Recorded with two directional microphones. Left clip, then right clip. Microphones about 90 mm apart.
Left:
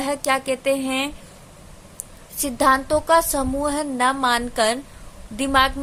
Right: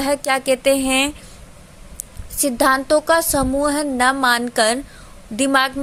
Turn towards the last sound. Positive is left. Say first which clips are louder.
# right 1 dB
turn(degrees=-50)  # may be behind; listen again after turning